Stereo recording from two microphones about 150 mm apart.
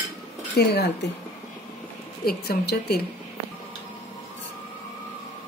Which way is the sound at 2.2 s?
90° left.